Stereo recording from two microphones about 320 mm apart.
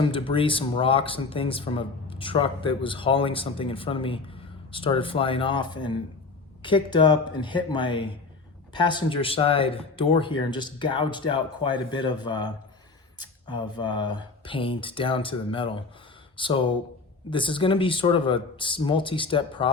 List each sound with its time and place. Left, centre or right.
0.0 s speech: centre